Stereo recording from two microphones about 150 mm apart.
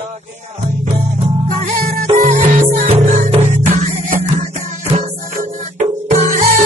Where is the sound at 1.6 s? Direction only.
60° right (ahead or behind).